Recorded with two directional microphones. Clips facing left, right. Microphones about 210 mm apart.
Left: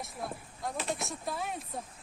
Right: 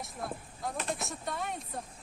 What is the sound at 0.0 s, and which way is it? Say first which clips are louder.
Speech: even; centre (ahead or behind).